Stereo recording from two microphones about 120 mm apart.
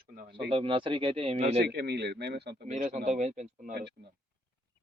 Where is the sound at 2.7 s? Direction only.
70° right (ahead or behind).